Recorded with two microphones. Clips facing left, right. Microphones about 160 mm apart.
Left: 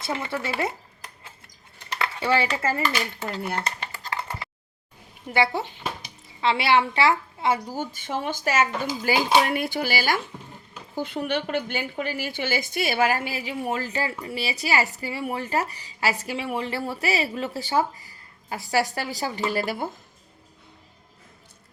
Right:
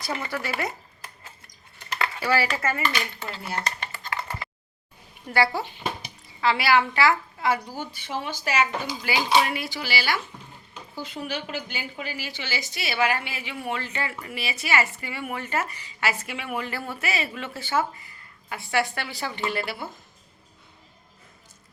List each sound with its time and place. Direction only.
0.0 s a woman's voice: 25° left (ahead or behind)
2.2 s a woman's voice: 25° left (ahead or behind)
5.3 s a woman's voice: 20° left (ahead or behind)
7.7 s a woman's voice: 45° left (ahead or behind)
10.9 s a woman's voice: 55° left (ahead or behind)